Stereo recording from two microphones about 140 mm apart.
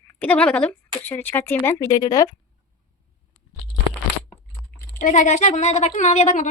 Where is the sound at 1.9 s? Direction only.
25° left (ahead or behind).